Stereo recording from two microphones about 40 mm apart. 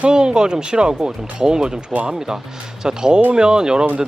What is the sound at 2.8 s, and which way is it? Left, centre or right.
Speech, centre.